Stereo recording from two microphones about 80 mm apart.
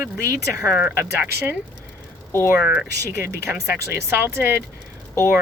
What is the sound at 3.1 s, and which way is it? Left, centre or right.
Speech, right.